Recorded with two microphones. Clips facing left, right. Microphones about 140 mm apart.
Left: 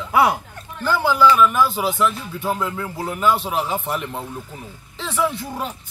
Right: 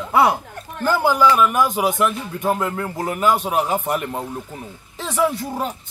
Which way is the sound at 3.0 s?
10° right (ahead or behind).